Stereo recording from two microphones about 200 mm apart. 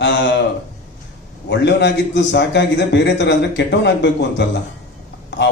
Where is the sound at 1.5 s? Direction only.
60° left (ahead or behind).